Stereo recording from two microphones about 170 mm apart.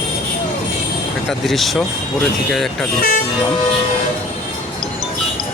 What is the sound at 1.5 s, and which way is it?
Speech, centre (ahead or behind).